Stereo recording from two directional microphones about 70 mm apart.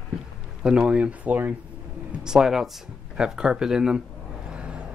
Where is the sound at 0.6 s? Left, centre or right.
Centre.